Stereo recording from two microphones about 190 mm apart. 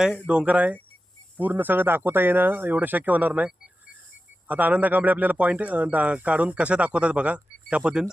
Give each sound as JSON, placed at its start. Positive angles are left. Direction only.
{"t": 0.0, "sound": "a man's voice", "side_deg": -5}